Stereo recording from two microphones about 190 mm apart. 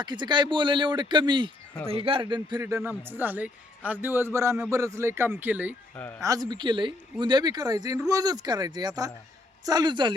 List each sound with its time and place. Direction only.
0.0 s a man's voice: 25° right (ahead or behind)